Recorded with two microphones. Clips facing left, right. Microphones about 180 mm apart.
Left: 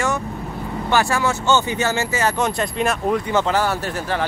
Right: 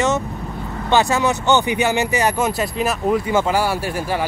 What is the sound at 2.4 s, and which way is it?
Speech, 5° right (ahead or behind).